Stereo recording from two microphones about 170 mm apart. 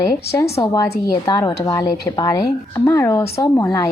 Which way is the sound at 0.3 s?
15° left (ahead or behind).